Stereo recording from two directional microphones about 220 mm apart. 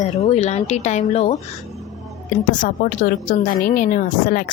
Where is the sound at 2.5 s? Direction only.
35° left (ahead or behind).